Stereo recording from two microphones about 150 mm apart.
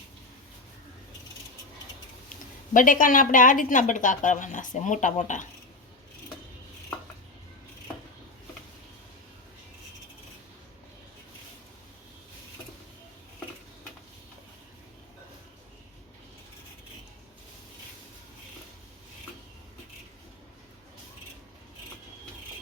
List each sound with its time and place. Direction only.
2.7 s speech: 60° left (ahead or behind)